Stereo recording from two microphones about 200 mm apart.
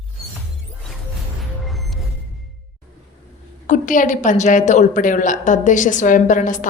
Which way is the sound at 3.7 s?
40° left (ahead or behind).